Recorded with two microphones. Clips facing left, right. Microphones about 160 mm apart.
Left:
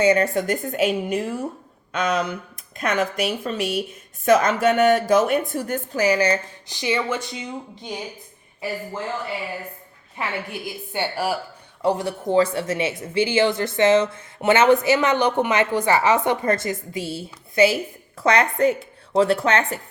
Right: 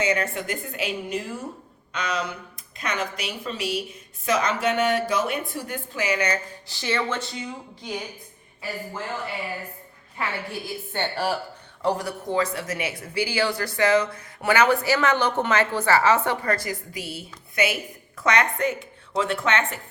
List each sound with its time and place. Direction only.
0.0 s a woman's voice: 35° left (ahead or behind)
6.7 s speech: 15° left (ahead or behind)
10.2 s speech: 20° left (ahead or behind)
10.9 s speech: 10° left (ahead or behind)
11.9 s speech: 25° left (ahead or behind)